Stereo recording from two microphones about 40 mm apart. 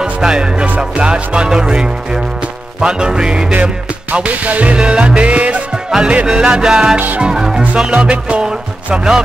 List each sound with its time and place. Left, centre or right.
0.0 s music: centre
4.1 s music: right
4.7 s music: right
5.2 s music: right
5.9 s music: centre
6.2 s music: centre
7.9 s music: right
8.5 s speech: centre